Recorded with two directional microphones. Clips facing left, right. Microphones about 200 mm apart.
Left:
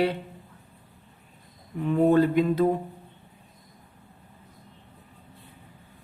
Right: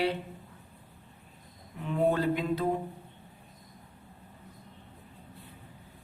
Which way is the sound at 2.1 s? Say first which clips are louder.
Left 8 dB; 50° left (ahead or behind).